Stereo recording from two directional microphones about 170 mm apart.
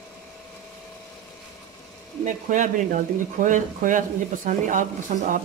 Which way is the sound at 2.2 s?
45° right (ahead or behind).